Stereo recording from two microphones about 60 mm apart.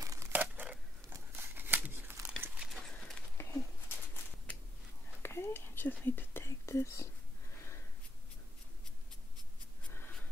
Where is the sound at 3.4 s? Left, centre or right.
Left.